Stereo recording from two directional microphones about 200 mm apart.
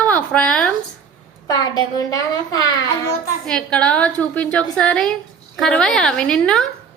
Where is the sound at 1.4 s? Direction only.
20° left (ahead or behind).